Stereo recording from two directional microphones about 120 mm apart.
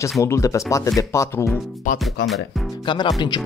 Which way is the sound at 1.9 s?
Centre (ahead or behind).